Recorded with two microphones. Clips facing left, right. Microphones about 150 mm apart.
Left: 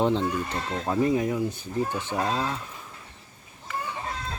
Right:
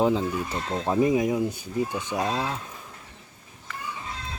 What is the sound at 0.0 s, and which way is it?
Speech, 5° right (ahead or behind).